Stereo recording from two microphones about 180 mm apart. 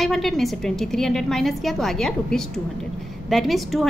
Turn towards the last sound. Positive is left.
turn(degrees=0)  # may be behind; listen again after turning